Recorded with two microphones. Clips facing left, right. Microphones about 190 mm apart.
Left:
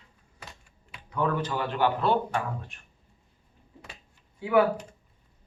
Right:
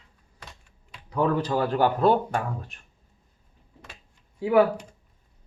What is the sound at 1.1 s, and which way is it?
Speech, 35° right (ahead or behind).